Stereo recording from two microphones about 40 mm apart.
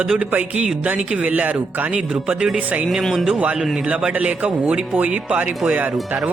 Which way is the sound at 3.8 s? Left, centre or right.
Right.